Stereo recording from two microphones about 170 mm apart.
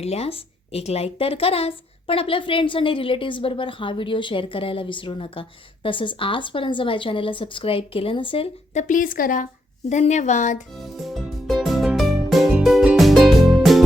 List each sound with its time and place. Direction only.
0.0 s a woman's voice: 35° left (ahead or behind)
8.7 s speech: 45° left (ahead or behind)
9.9 s speech: 45° left (ahead or behind)
10.8 s music: centre (ahead or behind)